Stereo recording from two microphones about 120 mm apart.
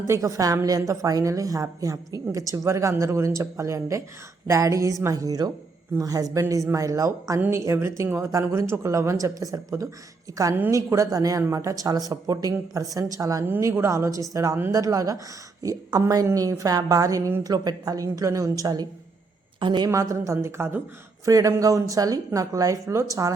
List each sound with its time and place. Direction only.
0.1 s a woman's voice: 25° right (ahead or behind)